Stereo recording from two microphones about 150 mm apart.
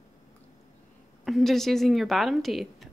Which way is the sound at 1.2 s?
Centre (ahead or behind).